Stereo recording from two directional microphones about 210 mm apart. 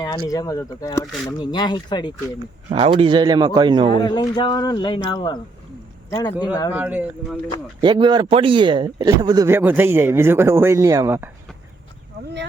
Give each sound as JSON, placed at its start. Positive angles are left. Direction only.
{"t": 0.0, "sound": "speech", "side_deg": 15}
{"t": 2.6, "sound": "a man's voice", "side_deg": -25}
{"t": 4.0, "sound": "speech", "side_deg": 20}
{"t": 6.7, "sound": "speech", "side_deg": -5}
{"t": 7.8, "sound": "speech", "side_deg": -20}